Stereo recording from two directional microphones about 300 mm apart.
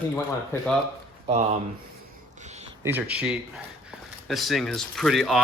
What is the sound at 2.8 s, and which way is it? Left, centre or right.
Speech, centre.